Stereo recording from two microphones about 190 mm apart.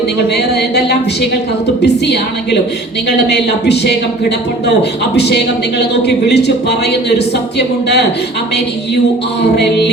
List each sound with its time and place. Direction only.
1.8 s a man's voice: 60° left (ahead or behind)
9.4 s a man's voice: 65° left (ahead or behind)